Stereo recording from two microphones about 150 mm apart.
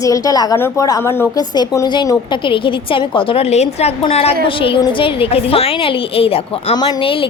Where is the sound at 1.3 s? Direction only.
25° left (ahead or behind); by 6.8 s 45° left (ahead or behind).